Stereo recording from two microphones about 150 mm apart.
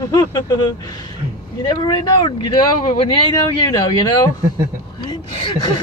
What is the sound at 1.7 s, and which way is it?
Speech, 30° left (ahead or behind).